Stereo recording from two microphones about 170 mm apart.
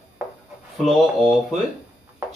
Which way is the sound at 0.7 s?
Centre (ahead or behind).